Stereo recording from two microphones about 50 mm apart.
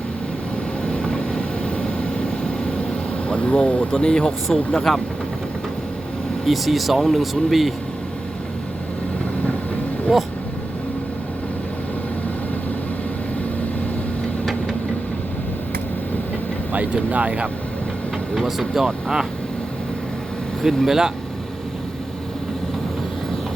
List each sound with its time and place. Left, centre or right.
0.9 s vehicle: centre
2.9 s speech: left
4.3 s speech: centre
4.7 s speech: centre
6.4 s speech: centre
10.1 s speech: centre
16.7 s speech: right
18.3 s speech: centre
20.6 s speech: centre